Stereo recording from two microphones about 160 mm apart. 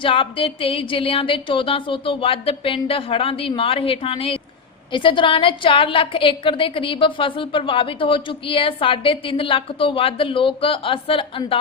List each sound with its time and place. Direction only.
0.0 s a woman's voice: 35° left (ahead or behind)